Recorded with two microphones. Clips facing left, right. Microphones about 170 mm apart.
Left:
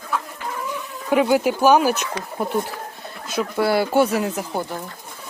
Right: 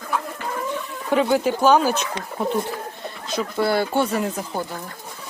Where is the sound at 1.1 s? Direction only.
10° left (ahead or behind).